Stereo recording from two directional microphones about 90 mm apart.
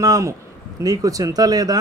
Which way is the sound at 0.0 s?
40° right (ahead or behind).